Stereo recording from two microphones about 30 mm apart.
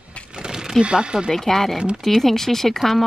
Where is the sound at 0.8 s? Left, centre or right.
Right.